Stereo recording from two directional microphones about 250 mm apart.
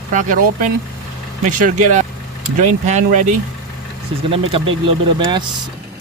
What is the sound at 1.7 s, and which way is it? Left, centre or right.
Speech, right.